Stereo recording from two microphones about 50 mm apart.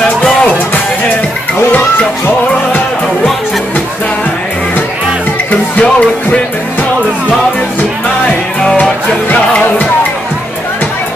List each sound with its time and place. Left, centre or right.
5.5 s music: left